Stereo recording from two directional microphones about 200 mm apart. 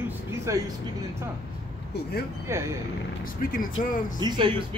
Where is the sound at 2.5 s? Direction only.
15° right (ahead or behind).